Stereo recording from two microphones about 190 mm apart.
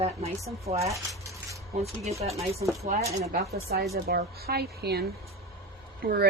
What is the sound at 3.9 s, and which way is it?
Speech, 55° right (ahead or behind).